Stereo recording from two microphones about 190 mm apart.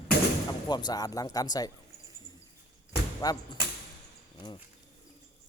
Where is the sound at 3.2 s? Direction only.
20° left (ahead or behind).